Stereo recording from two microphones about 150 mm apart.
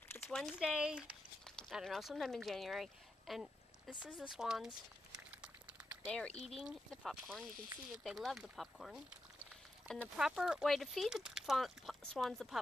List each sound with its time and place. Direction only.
0.1 s speech: 5° left (ahead or behind)
5.3 s a sound: 5° right (ahead or behind)
6.3 s speech: 45° left (ahead or behind)
6.6 s speech: 5° right (ahead or behind)